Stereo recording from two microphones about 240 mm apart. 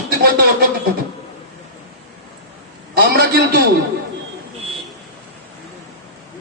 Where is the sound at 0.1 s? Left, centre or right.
Right.